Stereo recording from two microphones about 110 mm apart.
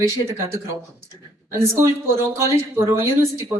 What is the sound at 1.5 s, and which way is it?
Speech, 25° right (ahead or behind).